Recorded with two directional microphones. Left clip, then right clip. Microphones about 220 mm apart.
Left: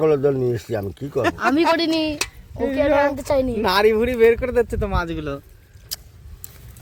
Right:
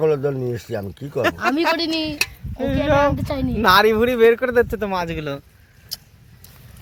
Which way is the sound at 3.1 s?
50° left (ahead or behind).